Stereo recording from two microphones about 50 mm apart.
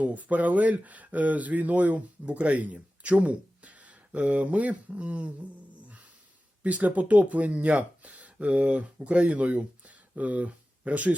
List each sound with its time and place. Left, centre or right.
0.0 s speech: right